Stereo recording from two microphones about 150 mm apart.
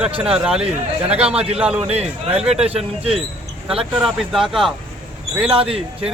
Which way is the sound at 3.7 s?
5° right (ahead or behind).